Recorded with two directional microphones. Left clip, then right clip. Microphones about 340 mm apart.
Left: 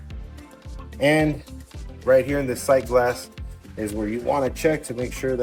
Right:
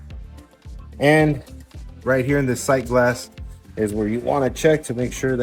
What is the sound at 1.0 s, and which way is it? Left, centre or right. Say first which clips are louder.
Speech: right 3 dB; right.